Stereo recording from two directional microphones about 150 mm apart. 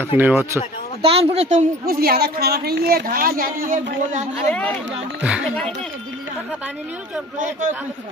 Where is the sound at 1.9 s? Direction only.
90° right; by 4.2 s 65° right (ahead or behind).